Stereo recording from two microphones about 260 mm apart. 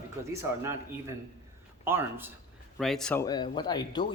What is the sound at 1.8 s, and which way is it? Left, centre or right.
A man's voice, centre.